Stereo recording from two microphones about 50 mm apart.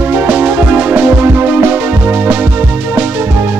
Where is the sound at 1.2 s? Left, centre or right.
Right.